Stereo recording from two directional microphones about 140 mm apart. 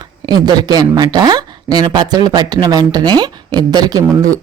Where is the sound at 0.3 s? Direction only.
30° right (ahead or behind).